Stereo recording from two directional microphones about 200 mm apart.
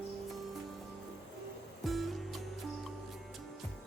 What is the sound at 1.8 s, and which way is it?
Music, centre (ahead or behind).